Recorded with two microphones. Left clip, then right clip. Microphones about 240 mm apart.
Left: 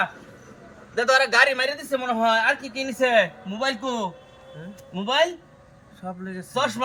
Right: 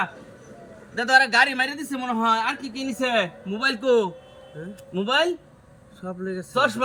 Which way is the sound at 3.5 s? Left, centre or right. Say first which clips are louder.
Right 5 dB; centre.